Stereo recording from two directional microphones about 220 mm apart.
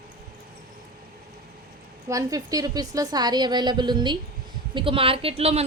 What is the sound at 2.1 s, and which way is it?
Speech, 15° right (ahead or behind).